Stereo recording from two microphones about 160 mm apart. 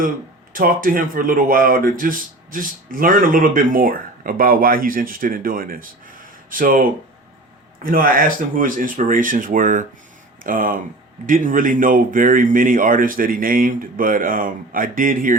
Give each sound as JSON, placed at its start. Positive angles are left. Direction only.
{"t": 0.5, "sound": "speech", "side_deg": -60}